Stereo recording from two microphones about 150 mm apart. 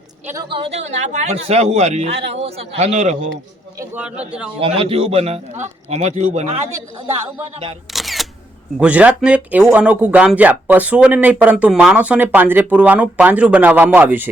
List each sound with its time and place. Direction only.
0.4 s a man's voice: 35° right (ahead or behind); by 3.2 s 50° right (ahead or behind)
3.9 s speech: 10° right (ahead or behind)
4.6 s a man's voice: 40° right (ahead or behind)
7.9 s single-lens reflex camera: centre (ahead or behind)
8.8 s speech: 10° right (ahead or behind)